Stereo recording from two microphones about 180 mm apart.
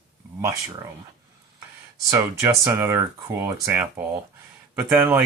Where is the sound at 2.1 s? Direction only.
15° right (ahead or behind).